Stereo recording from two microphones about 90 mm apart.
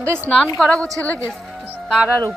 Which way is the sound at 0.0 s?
30° right (ahead or behind).